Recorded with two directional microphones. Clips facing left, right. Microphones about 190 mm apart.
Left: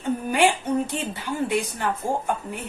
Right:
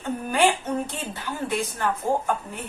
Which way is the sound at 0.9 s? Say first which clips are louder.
Left 4 dB; 15° left (ahead or behind).